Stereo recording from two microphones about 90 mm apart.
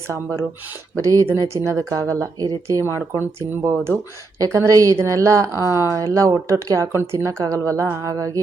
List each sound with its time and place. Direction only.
0.1 s speech: 35° right (ahead or behind)